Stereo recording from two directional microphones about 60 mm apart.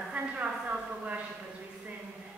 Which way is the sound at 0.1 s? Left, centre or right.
Right.